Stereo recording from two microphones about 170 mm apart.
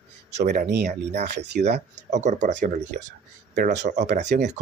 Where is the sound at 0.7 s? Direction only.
80° right.